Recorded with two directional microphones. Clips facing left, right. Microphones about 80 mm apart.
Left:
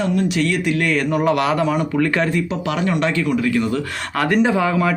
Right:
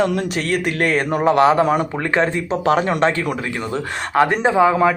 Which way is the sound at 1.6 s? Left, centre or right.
Right.